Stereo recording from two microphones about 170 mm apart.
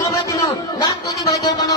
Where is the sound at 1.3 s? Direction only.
20° left (ahead or behind).